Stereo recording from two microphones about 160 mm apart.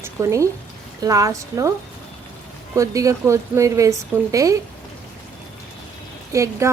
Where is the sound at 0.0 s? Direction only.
20° right (ahead or behind).